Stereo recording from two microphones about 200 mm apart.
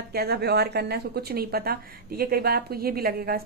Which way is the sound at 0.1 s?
50° right (ahead or behind).